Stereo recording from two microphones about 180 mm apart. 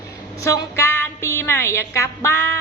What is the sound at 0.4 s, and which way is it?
A woman's voice, 15° left (ahead or behind).